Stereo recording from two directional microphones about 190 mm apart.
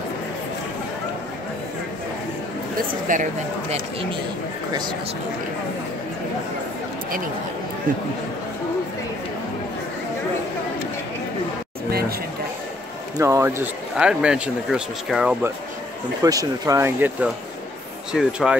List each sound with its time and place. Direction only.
3.1 s speech: 45° right (ahead or behind)
11.9 s a sound: 55° right (ahead or behind)
13.2 s speech: 15° right (ahead or behind)
16.2 s speech: 20° right (ahead or behind)